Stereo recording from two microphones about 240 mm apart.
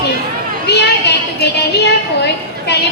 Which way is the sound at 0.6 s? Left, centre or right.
Left.